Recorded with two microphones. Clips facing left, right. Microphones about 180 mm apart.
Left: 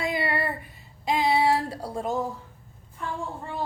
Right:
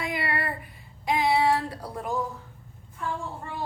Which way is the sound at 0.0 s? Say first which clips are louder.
Left 3 dB; 25° left (ahead or behind).